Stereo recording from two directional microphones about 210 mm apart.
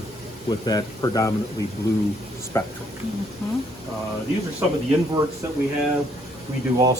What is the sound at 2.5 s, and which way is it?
Speech, 15° left (ahead or behind).